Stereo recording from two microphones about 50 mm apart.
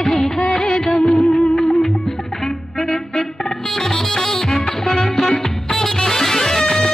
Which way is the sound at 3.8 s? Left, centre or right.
Centre.